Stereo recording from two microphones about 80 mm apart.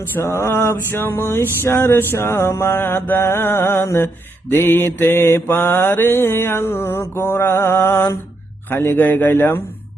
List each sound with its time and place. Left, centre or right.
0.2 s mantra: left